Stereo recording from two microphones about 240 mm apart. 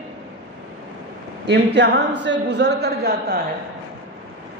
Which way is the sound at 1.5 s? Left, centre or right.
Right.